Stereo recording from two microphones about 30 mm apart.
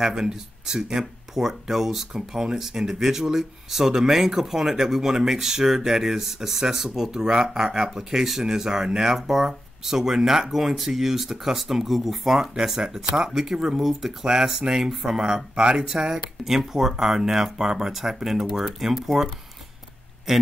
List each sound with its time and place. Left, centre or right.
0.0 s speech: right
12.4 s speech: centre
20.3 s speech: centre